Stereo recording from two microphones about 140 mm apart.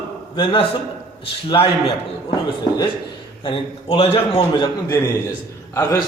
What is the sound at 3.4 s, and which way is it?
A man's voice, 40° left (ahead or behind).